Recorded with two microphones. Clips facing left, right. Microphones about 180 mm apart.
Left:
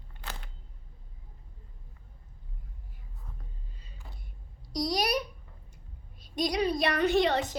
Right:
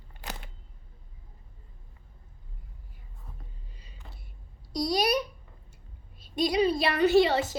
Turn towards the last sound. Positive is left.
turn(degrees=-5)  # may be behind; listen again after turning